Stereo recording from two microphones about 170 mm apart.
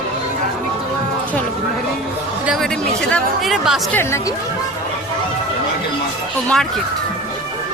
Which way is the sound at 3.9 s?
15° left (ahead or behind).